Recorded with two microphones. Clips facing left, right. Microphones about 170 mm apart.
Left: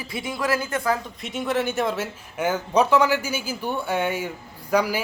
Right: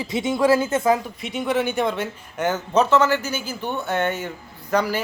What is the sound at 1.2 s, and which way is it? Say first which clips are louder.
A man's voice: right 2 dB; centre (ahead or behind).